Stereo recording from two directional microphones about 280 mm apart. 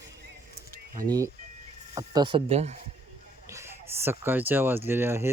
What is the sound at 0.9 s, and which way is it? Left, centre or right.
Speech, centre.